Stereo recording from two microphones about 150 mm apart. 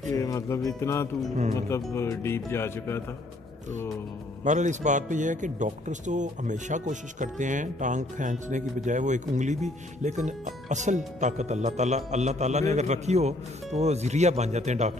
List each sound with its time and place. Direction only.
0.1 s music: 20° left (ahead or behind)
1.7 s speech: 20° left (ahead or behind)
4.5 s a man's voice: 55° right (ahead or behind)